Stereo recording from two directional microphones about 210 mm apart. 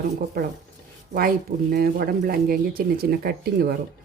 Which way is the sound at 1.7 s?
45° right (ahead or behind).